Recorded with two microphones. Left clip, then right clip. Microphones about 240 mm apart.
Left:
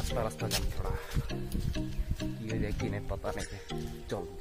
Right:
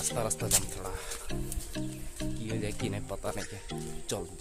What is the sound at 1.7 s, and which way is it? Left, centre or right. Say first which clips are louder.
Speech: right 1 dB; centre.